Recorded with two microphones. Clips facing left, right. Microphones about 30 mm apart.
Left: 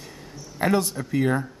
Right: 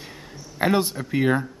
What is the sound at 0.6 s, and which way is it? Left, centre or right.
Speech, right.